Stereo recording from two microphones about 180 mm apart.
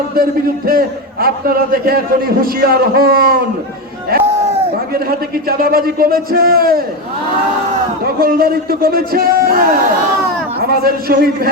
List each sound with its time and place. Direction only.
0.2 s a man's voice: 55° right (ahead or behind)
5.5 s a man's voice: 55° right (ahead or behind)
8.0 s a man's voice: 55° right (ahead or behind)